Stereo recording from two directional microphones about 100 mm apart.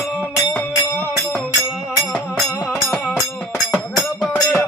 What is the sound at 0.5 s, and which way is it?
Music, 20° left (ahead or behind).